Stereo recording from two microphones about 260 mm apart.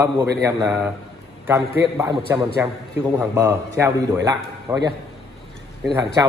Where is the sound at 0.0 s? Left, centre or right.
Centre.